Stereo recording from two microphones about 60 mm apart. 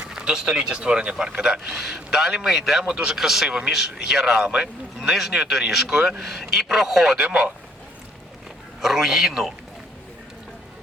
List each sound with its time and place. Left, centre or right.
0.1 s a man's voice: centre
7.2 s speech: centre
8.8 s speech: centre